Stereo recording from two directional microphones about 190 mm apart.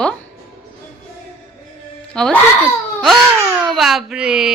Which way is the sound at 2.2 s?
5° left (ahead or behind).